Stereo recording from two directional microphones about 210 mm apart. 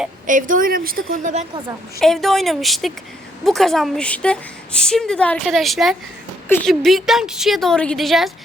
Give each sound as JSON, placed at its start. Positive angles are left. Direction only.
{"t": 0.3, "sound": "speech", "side_deg": -40}
{"t": 2.0, "sound": "a woman's voice", "side_deg": 0}